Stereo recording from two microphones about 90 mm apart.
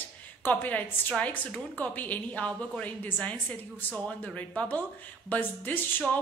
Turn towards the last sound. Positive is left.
turn(degrees=20)  # may be behind; listen again after turning